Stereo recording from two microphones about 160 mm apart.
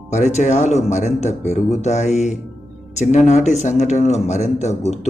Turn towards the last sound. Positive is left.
turn(degrees=45)  # may be behind; listen again after turning